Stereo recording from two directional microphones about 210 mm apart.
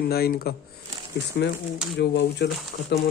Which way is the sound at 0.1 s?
45° left (ahead or behind).